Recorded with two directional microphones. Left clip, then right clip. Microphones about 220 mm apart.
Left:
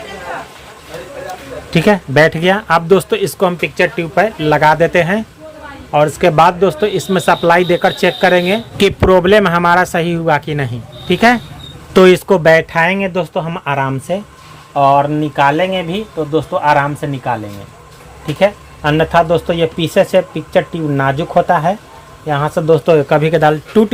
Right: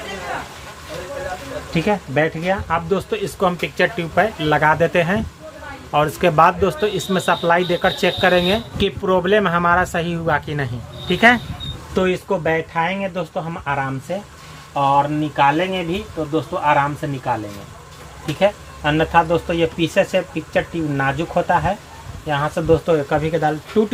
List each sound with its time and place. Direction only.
1.7 s speech: 45° left (ahead or behind); by 8.6 s 15° left (ahead or behind)
8.8 s speech: 30° left (ahead or behind)
11.9 s speech: 50° left (ahead or behind)
18.3 s speech: 40° left (ahead or behind)